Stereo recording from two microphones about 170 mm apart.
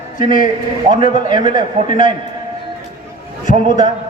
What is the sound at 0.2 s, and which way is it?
A man's voice, 30° right (ahead or behind).